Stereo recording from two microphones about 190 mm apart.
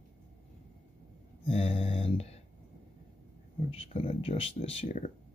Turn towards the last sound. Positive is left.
turn(degrees=35)  # may be behind; listen again after turning